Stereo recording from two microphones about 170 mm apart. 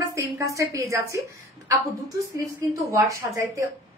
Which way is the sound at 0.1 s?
20° right (ahead or behind).